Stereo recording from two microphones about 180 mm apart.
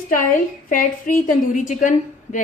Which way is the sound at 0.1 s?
50° left (ahead or behind).